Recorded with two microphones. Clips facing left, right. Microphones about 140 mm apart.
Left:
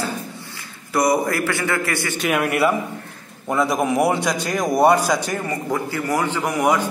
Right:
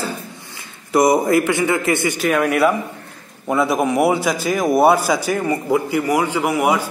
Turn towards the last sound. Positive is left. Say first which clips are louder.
# right 2 dB
turn(degrees=-10)  # may be behind; listen again after turning